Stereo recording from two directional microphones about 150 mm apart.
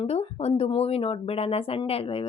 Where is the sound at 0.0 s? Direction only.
45° left (ahead or behind).